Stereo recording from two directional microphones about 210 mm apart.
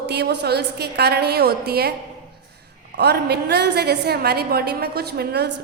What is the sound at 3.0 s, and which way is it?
A woman's voice, 50° right (ahead or behind).